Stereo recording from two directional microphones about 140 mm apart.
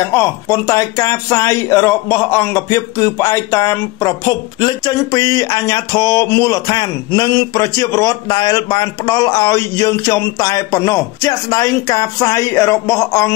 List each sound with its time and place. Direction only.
0.0 s speech: 20° left (ahead or behind)